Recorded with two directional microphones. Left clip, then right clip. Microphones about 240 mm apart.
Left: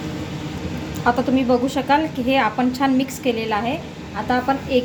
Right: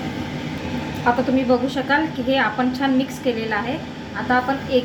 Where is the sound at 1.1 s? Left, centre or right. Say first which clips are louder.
Even; left.